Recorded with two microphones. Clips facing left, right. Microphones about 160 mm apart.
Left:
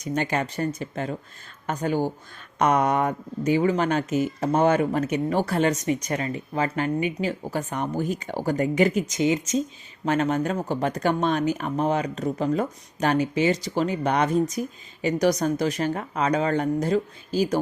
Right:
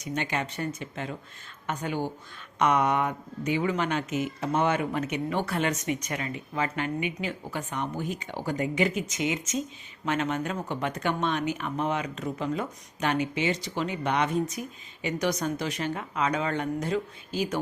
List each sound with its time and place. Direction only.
0.0 s speech: 40° left (ahead or behind)